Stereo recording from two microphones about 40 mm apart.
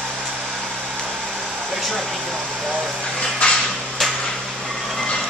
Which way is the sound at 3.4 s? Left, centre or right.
Left.